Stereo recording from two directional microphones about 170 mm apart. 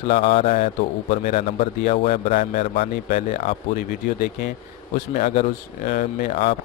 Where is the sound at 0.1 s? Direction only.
35° left (ahead or behind).